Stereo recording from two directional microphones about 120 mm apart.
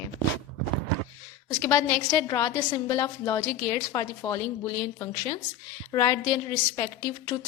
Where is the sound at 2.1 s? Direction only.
25° left (ahead or behind).